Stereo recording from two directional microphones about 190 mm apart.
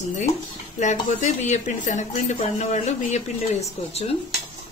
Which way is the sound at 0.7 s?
40° left (ahead or behind).